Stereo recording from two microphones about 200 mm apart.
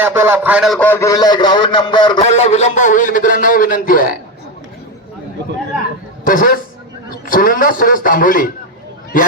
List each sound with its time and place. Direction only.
0.0 s a man's voice: 10° right (ahead or behind); by 2.2 s 20° left (ahead or behind)
2.2 s a man's voice: 35° left (ahead or behind)
6.2 s a man's voice: 45° left (ahead or behind)